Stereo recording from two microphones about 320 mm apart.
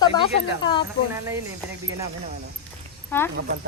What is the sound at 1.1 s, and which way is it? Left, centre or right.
Speech, centre.